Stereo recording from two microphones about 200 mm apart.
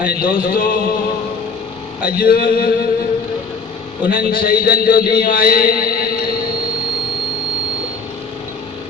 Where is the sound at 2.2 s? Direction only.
45° left (ahead or behind).